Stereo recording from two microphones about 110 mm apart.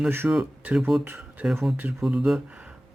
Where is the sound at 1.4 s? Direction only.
Centre (ahead or behind).